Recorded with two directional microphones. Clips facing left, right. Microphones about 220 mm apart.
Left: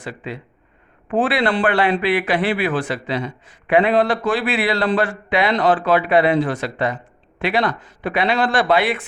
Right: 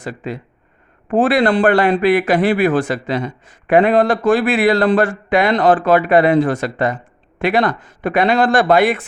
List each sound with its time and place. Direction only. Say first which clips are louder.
0.0 s a man's voice: right 4 dB; 45° right (ahead or behind)